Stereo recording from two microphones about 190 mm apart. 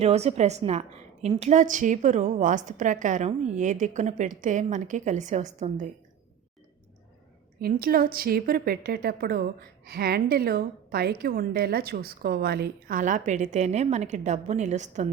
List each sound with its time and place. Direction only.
0.0 s a woman's voice: 35° right (ahead or behind)
7.6 s a woman's voice: 50° right (ahead or behind)